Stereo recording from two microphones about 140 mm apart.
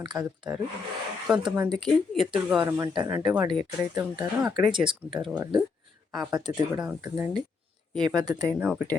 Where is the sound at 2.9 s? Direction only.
25° right (ahead or behind).